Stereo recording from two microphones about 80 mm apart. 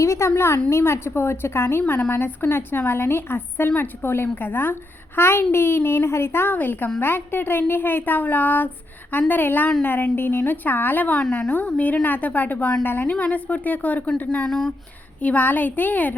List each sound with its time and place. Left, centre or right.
0.0 s a woman's voice: left; by 14.7 s centre
15.2 s a woman's voice: centre